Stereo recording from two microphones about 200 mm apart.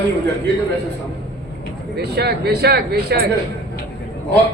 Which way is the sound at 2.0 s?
55° right (ahead or behind).